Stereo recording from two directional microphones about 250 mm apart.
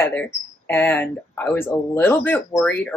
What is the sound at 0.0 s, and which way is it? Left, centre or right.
Speech, centre.